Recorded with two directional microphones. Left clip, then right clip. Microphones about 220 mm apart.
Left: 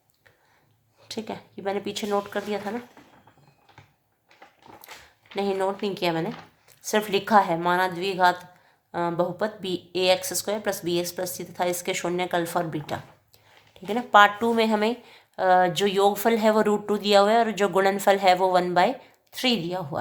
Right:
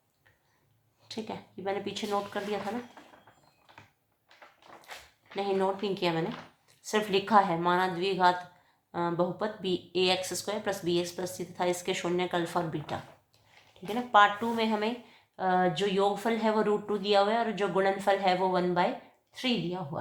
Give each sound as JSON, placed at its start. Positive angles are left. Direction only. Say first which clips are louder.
{"t": 1.0, "sound": "speech", "louder": "left 5 dB", "side_deg": 25}
{"t": 5.3, "sound": "speech", "louder": "left 3 dB", "side_deg": 30}